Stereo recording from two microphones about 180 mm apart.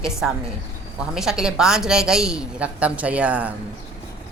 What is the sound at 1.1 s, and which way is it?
A woman's voice, centre (ahead or behind).